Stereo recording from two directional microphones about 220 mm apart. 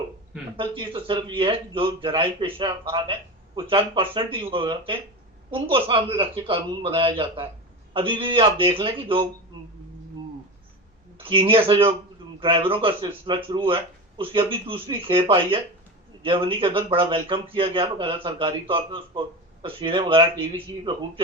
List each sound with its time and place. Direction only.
0.5 s a man's voice: 25° right (ahead or behind)
11.2 s a man's voice: 25° right (ahead or behind)